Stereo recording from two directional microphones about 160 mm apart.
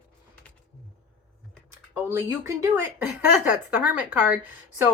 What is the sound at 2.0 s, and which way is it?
Speech, 15° right (ahead or behind).